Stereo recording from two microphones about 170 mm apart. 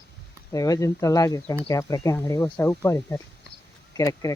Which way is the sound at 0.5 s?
20° left (ahead or behind).